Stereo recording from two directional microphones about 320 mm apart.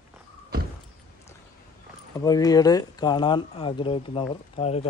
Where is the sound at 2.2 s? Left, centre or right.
Centre.